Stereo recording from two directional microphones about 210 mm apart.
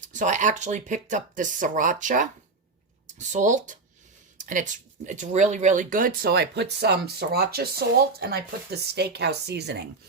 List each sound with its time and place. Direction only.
0.0 s speech: 35° right (ahead or behind); by 9.8 s 50° right (ahead or behind)